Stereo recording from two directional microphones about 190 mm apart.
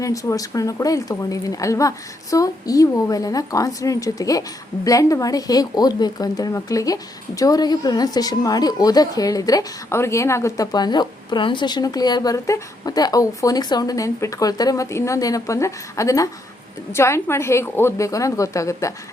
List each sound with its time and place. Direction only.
0.0 s a woman's voice: 15° left (ahead or behind)